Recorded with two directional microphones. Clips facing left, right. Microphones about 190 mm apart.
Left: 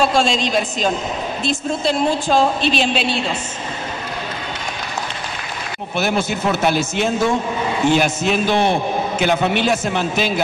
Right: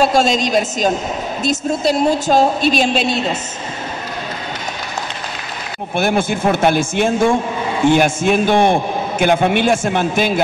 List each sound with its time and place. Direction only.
0.1 s a woman's voice: 45° right (ahead or behind)
5.9 s a woman's voice: 55° right (ahead or behind)